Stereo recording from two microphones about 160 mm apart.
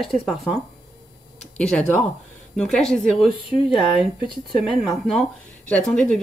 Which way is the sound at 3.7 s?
5° right (ahead or behind).